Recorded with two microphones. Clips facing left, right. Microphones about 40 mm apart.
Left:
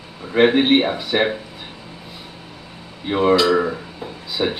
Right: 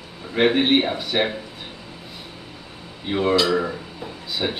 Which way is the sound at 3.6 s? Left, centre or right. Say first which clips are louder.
Left 4 dB; centre.